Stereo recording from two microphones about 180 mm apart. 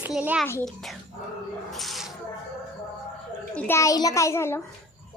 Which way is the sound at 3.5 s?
15° left (ahead or behind).